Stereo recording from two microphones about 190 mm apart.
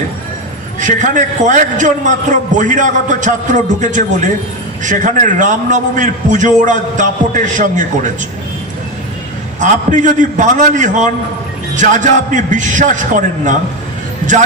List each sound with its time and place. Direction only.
0.8 s a man's voice: 40° right (ahead or behind)
9.6 s a man's voice: 40° right (ahead or behind)